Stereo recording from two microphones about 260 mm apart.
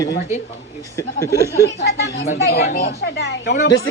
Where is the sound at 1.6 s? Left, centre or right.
Left.